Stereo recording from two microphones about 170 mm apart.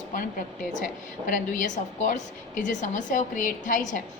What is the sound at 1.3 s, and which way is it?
A woman's voice, 50° left (ahead or behind).